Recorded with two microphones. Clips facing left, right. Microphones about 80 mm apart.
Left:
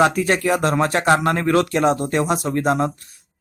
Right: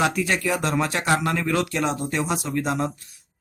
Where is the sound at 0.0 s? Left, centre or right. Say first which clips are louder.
Left 6 dB; left.